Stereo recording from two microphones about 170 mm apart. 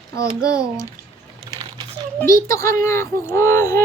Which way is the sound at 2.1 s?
15° left (ahead or behind).